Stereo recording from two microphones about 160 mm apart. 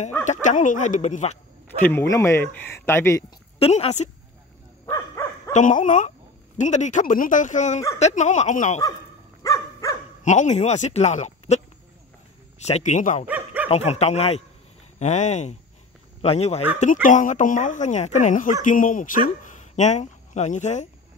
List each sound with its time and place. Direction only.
0.3 s speech: 50° left (ahead or behind)
1.8 s speech: 15° left (ahead or behind)
3.5 s a woman's voice: 40° left (ahead or behind)
4.8 s dog: 15° left (ahead or behind)
5.5 s speech: 50° left (ahead or behind)
9.4 s dog: 20° left (ahead or behind)
10.2 s speech: 50° left (ahead or behind)
13.3 s dog: 10° right (ahead or behind)
13.7 s a woman's voice: 40° left (ahead or behind)
16.8 s speech: 50° left (ahead or behind)